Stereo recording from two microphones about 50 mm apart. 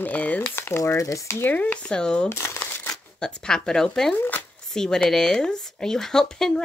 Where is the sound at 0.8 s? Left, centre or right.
Left.